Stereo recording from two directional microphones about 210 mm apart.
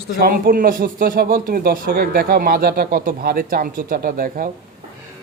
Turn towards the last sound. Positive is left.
turn(degrees=-45)  # may be behind; listen again after turning